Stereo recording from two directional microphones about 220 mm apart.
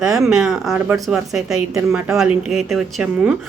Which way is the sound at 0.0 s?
Centre (ahead or behind).